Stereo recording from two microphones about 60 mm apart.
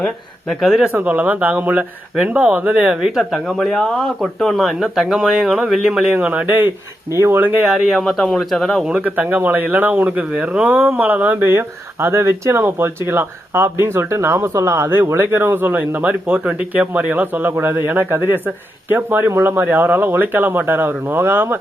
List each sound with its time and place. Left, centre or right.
0.4 s speech: centre
0.9 s speech: right
6.1 s speech: right
7.2 s speech: right
7.6 s speech: centre
8.9 s speech: right
10.7 s speech: right
14.3 s speech: right